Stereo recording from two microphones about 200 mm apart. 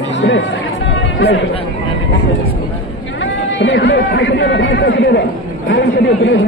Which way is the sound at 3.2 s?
65° left (ahead or behind).